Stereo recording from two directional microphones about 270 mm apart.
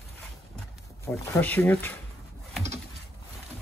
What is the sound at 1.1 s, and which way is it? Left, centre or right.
Speech, centre.